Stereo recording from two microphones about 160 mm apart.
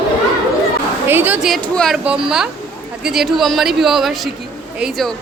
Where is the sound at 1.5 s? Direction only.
Centre (ahead or behind).